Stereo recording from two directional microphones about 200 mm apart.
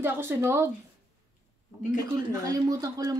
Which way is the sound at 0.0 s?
10° right (ahead or behind).